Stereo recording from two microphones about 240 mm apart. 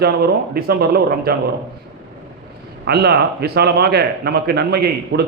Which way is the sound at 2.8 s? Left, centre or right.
Right.